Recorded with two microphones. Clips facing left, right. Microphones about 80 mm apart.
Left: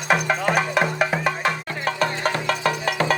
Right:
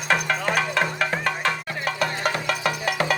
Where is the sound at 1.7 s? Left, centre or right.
Left.